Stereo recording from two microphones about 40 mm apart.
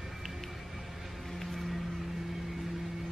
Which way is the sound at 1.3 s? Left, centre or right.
Centre.